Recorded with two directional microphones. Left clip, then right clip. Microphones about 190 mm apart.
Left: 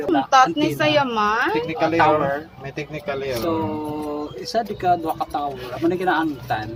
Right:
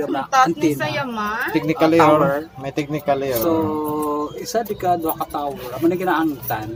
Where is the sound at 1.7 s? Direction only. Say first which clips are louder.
Right 5 dB; 60° right (ahead or behind).